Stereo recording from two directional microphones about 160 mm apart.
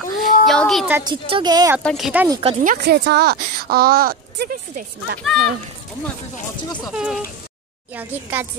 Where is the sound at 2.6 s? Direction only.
70° right (ahead or behind).